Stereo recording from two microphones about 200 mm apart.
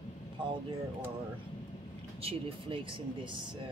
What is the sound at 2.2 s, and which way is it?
Speech, 30° right (ahead or behind).